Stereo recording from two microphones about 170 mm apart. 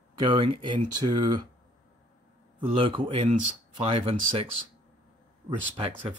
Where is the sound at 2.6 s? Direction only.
30° right (ahead or behind).